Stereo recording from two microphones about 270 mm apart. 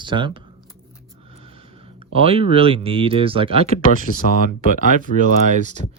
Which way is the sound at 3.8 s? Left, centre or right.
Left.